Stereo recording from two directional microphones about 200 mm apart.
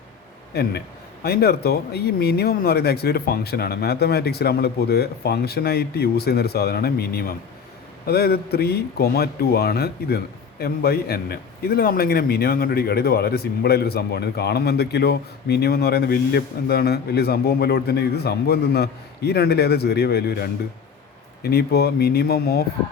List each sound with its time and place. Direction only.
0.5 s a man's voice: 50° left (ahead or behind)